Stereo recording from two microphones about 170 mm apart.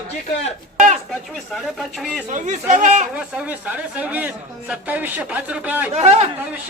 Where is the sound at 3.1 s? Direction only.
10° right (ahead or behind).